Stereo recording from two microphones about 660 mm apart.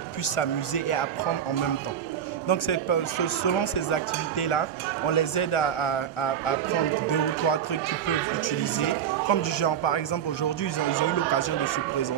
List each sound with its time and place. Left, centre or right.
0.4 s speech: left
2.4 s speech: left
9.3 s speech: left